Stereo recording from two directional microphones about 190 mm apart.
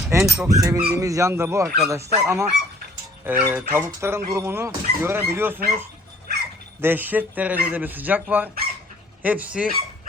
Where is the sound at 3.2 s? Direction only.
10° right (ahead or behind).